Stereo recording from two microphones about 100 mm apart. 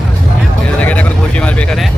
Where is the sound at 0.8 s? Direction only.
15° left (ahead or behind).